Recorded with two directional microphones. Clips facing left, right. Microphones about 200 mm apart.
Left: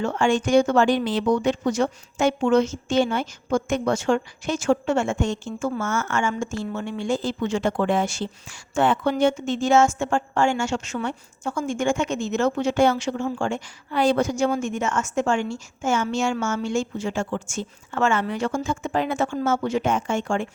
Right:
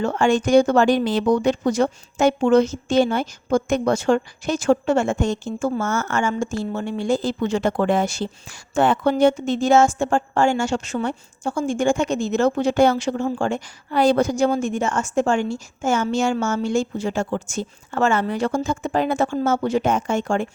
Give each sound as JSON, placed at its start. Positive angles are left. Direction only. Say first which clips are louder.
{"t": 0.0, "sound": "speech", "louder": "right 3 dB", "side_deg": -40}